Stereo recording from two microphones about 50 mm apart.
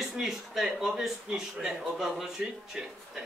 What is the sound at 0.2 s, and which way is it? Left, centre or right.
A man's voice, centre.